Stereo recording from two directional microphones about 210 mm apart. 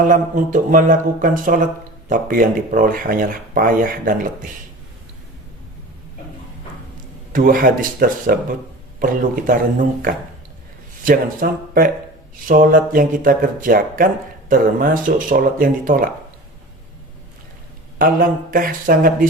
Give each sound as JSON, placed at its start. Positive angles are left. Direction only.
{"t": 0.0, "sound": "speech", "side_deg": -40}
{"t": 7.3, "sound": "speech", "side_deg": -40}
{"t": 11.0, "sound": "speech", "side_deg": -40}
{"t": 18.0, "sound": "speech", "side_deg": -40}